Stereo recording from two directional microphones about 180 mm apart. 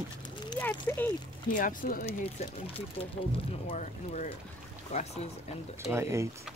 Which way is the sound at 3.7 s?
40° left (ahead or behind).